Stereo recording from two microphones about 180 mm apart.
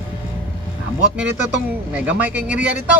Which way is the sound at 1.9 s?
10° right (ahead or behind).